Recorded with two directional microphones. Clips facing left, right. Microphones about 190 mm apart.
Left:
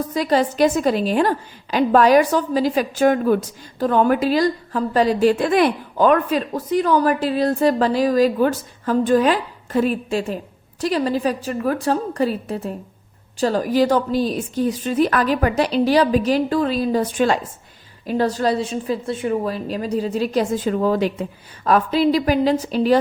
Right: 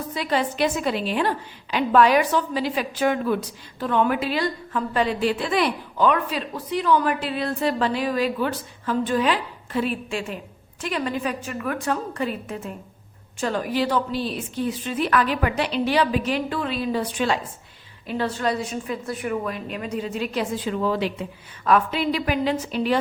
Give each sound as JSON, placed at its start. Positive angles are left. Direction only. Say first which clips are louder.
{"t": 0.1, "sound": "a woman's voice", "louder": "left 5 dB", "side_deg": 40}